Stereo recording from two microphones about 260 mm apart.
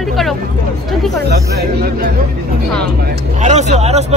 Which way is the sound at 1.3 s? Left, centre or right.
Right.